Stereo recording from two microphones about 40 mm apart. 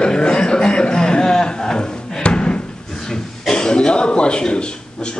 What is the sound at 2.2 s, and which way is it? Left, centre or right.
Slam, left.